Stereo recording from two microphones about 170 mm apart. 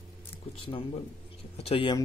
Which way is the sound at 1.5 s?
35° left (ahead or behind).